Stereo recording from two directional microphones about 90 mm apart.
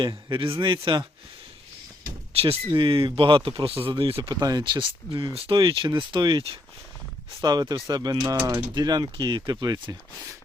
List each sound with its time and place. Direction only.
0.0 s speech: 75° right (ahead or behind)
2.3 s speech: 90° right
4.3 s speech: 50° right (ahead or behind)
4.6 s speech: 70° right (ahead or behind)
5.3 s speech: 85° right; by 6.4 s 55° right (ahead or behind)
7.4 s speech: 50° right (ahead or behind)
8.7 s speech: 50° right (ahead or behind)